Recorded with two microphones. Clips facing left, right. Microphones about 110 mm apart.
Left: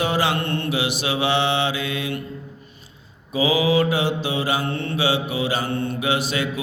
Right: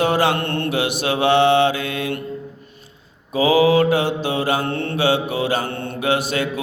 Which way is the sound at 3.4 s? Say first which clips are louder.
Right 4 dB; 50° right (ahead or behind).